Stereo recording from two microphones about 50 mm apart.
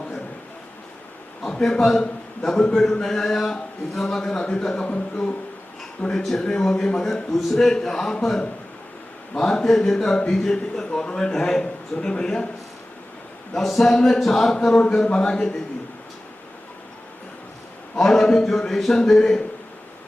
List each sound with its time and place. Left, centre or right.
1.5 s a man's voice: centre
13.5 s speech: centre
17.9 s speech: centre